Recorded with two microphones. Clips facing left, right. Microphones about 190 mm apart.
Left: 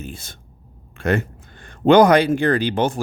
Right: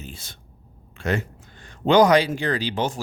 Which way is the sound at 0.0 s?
50° left (ahead or behind).